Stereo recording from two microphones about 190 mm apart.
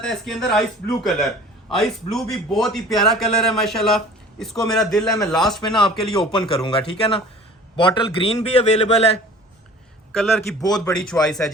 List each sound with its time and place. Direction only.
0.0 s a man's voice: centre (ahead or behind)
5.5 s a man's voice: 25° left (ahead or behind)
10.1 s a man's voice: centre (ahead or behind)
10.6 s speech: 20° left (ahead or behind)
10.9 s a man's voice: 5° left (ahead or behind)